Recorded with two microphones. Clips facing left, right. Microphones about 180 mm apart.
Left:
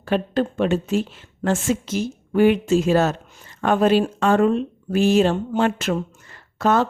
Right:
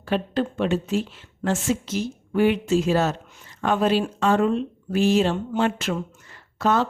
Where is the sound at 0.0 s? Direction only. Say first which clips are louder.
Left 3 dB; 45° left (ahead or behind).